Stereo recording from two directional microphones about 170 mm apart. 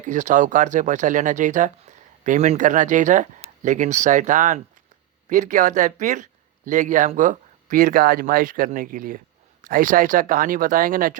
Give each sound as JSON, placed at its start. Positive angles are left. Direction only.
{"t": 0.0, "sound": "speech", "side_deg": -45}